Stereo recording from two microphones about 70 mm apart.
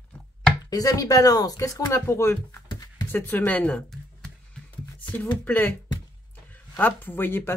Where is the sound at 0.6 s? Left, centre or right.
Left.